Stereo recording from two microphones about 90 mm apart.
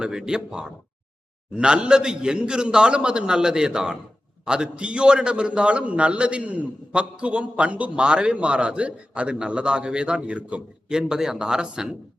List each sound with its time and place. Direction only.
0.0 s a man's voice: 10° right (ahead or behind)